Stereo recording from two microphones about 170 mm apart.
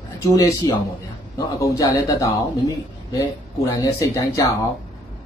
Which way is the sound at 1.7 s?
20° left (ahead or behind).